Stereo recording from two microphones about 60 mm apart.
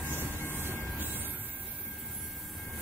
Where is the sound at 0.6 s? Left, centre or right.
Right.